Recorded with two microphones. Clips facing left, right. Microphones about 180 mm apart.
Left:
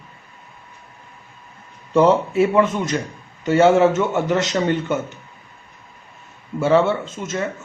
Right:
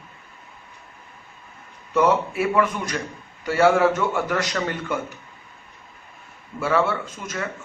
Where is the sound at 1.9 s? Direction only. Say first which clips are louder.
Left 5 dB; 25° left (ahead or behind).